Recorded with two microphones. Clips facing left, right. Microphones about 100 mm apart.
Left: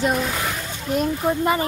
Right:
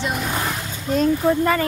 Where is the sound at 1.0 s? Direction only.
20° left (ahead or behind).